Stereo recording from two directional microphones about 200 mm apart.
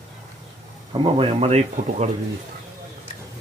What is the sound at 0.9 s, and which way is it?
Speech, 25° right (ahead or behind).